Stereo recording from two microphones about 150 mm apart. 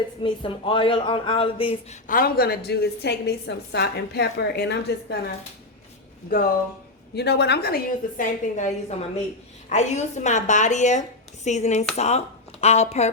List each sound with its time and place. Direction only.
0.2 s speech: 35° left (ahead or behind)
1.9 s a woman's voice: 65° left (ahead or behind); by 5.1 s 90° left
7.2 s a woman's voice: 90° left; by 13.1 s 45° left (ahead or behind)